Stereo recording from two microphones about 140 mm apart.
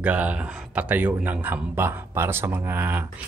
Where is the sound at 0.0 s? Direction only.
10° right (ahead or behind).